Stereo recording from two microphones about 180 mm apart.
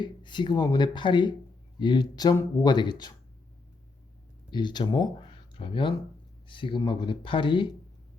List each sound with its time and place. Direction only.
0.0 s speech: 25° left (ahead or behind)
4.5 s speech: 25° left (ahead or behind)